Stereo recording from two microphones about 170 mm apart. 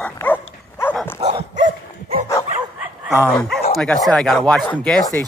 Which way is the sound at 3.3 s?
5° left (ahead or behind).